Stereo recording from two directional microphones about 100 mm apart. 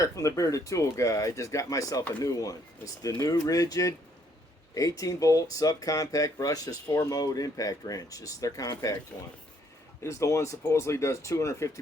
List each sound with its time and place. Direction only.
0.0 s speech: 30° left (ahead or behind)
10.0 s speech: 30° left (ahead or behind)